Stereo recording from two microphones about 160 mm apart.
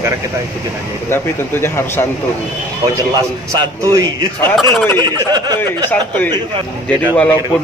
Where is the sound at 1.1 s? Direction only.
15° left (ahead or behind).